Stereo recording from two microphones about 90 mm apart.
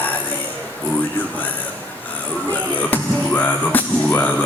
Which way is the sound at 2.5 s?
20° left (ahead or behind).